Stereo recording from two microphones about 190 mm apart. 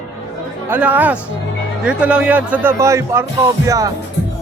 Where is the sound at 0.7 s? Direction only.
10° right (ahead or behind).